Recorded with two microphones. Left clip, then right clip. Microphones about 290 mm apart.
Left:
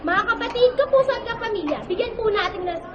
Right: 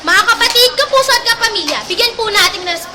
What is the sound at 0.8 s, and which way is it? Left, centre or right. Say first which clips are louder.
A woman's voice: right 7 dB; centre.